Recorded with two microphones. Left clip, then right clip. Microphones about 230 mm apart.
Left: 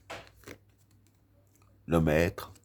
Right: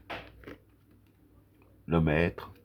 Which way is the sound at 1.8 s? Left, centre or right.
Left.